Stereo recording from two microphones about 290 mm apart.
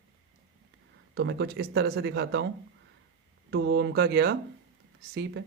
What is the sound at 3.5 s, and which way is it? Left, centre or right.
Speech, right.